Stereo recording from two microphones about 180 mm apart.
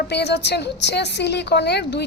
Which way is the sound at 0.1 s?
70° left (ahead or behind).